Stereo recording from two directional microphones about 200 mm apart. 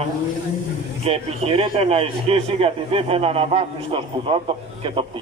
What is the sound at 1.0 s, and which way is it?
A man's voice, 30° right (ahead or behind).